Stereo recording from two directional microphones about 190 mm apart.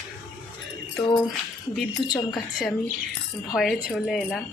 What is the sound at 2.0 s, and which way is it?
Speech, 25° left (ahead or behind).